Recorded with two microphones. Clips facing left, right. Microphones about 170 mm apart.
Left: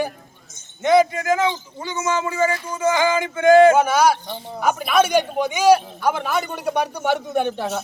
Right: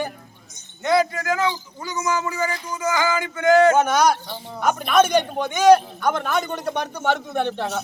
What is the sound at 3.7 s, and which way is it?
A man's voice, 5° left (ahead or behind).